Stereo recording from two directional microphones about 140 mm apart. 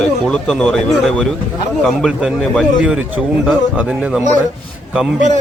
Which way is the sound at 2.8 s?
10° right (ahead or behind).